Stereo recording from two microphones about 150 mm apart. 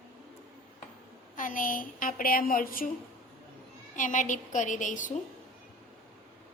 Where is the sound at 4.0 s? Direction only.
55° left (ahead or behind).